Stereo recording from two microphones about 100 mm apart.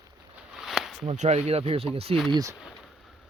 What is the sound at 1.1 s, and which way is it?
Speech, 90° right.